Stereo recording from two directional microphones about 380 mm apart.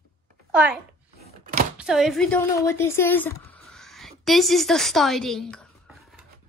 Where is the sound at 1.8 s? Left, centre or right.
Centre.